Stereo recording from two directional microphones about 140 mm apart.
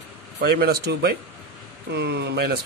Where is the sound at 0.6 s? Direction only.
90° right.